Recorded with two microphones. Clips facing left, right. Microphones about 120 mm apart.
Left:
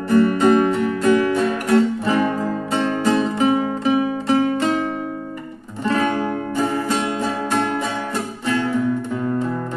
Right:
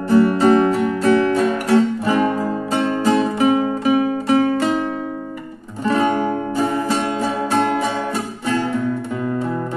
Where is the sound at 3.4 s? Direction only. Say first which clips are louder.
Right 2 dB; 10° right (ahead or behind).